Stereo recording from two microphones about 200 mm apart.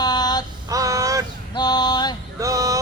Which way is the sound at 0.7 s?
15° right (ahead or behind).